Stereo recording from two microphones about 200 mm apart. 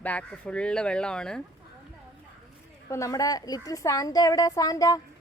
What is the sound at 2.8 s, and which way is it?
A woman's voice, 15° left (ahead or behind).